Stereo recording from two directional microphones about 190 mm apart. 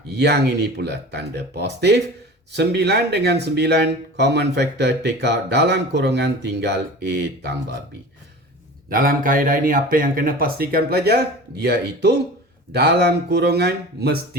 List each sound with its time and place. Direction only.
0.1 s speech: 60° right (ahead or behind)
8.9 s speech: 50° right (ahead or behind)